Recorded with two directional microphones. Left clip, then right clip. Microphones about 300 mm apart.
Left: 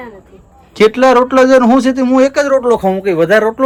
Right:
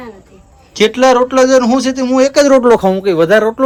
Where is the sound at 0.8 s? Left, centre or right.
Centre.